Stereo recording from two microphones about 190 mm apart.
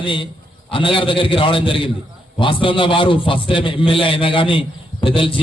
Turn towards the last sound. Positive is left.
turn(degrees=25)  # may be behind; listen again after turning